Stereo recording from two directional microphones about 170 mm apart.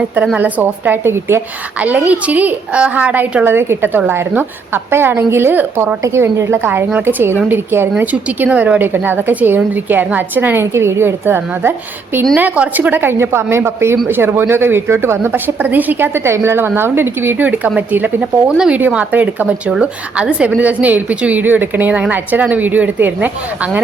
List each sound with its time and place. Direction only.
0.3 s a woman's voice: 10° right (ahead or behind)